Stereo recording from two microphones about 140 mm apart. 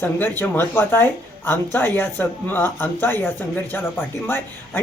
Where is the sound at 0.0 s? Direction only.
15° left (ahead or behind).